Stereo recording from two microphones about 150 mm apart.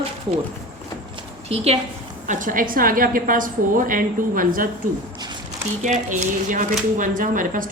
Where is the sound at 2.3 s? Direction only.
65° right (ahead or behind).